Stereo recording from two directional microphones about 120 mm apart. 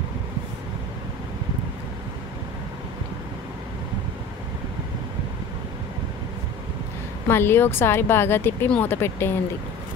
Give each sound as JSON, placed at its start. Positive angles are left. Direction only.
{"t": 7.2, "sound": "speech", "side_deg": 20}